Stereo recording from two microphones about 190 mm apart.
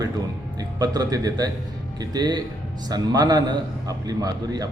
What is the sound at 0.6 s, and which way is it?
A man's voice, 20° right (ahead or behind).